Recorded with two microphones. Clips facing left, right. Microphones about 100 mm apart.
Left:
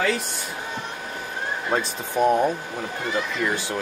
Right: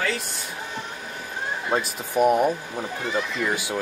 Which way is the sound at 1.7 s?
10° right (ahead or behind).